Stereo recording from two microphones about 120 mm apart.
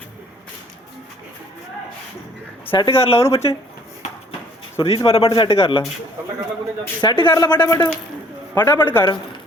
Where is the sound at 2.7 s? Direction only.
50° left (ahead or behind).